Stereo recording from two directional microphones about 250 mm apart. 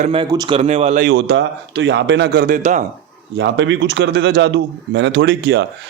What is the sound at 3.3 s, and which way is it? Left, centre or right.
A man's voice, right.